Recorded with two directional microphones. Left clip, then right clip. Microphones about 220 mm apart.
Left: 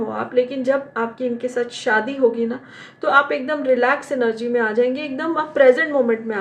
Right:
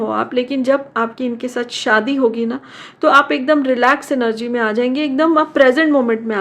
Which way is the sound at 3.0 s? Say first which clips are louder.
Right 5 dB; 40° right (ahead or behind).